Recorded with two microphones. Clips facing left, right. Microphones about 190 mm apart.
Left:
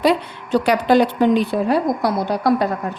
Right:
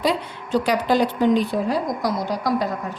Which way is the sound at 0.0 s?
60° left (ahead or behind).